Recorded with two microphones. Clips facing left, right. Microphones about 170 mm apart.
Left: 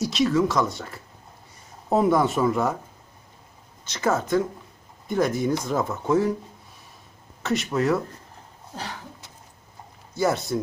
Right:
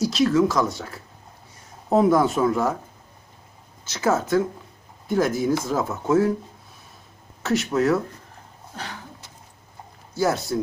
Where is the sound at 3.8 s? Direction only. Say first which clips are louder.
Right 2 dB; 5° right (ahead or behind).